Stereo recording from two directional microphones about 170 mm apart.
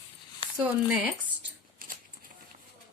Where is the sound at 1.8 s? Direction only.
55° right (ahead or behind).